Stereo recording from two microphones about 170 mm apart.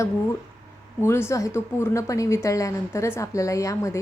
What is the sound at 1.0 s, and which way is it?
Speech, 15° left (ahead or behind).